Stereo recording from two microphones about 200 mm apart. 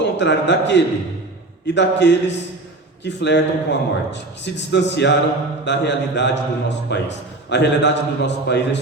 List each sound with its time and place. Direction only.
0.0 s a man's voice: 60° left (ahead or behind)